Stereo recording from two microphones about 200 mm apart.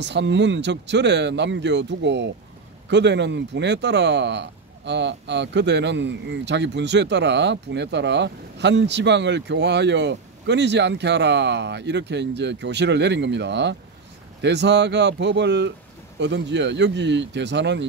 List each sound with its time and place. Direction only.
0.0 s speech: 60° right (ahead or behind)